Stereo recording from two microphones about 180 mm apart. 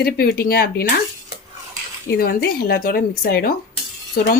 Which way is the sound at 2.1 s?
60° left (ahead or behind).